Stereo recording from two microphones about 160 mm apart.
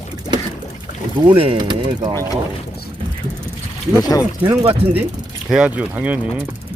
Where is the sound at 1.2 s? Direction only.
30° right (ahead or behind).